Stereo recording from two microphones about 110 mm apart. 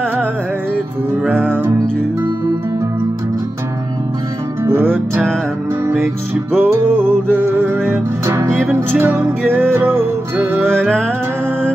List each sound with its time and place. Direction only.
1.3 s music: 10° left (ahead or behind)
4.6 s music: 20° right (ahead or behind)
6.5 s music: 20° right (ahead or behind)